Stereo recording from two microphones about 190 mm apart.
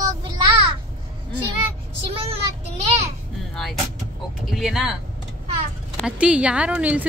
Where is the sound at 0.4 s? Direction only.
25° right (ahead or behind).